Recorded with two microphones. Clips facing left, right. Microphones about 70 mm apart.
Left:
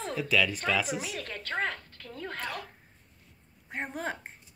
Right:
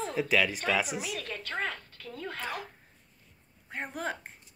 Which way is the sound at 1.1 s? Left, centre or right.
Left.